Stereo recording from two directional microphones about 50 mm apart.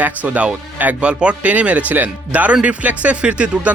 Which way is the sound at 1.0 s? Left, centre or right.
Right.